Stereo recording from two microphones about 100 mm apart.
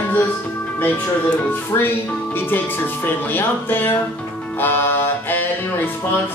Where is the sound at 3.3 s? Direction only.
20° left (ahead or behind).